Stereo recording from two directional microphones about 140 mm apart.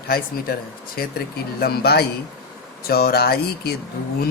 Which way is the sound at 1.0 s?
90° left.